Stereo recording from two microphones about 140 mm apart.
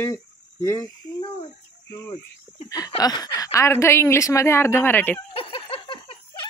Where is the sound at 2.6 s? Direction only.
25° left (ahead or behind).